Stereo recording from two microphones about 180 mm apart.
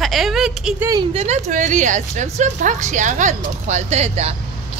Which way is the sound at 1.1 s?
40° right (ahead or behind).